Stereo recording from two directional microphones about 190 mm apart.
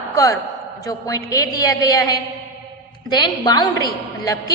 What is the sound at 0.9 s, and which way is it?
A woman's voice, 20° left (ahead or behind).